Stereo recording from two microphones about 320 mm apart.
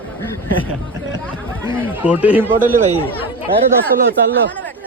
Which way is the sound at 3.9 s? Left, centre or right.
Right.